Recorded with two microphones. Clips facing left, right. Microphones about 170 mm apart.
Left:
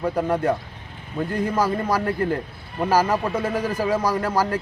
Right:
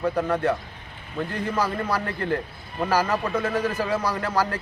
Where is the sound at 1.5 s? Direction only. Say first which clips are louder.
Left 2 dB; 10° left (ahead or behind).